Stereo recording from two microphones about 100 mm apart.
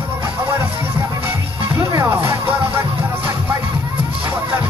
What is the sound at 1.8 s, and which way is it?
Music, 25° right (ahead or behind).